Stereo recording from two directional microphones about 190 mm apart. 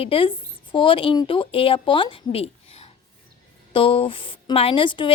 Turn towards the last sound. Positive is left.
turn(degrees=25)  # may be behind; listen again after turning